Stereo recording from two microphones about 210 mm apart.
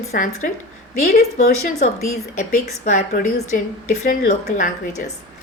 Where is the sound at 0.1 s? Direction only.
45° left (ahead or behind).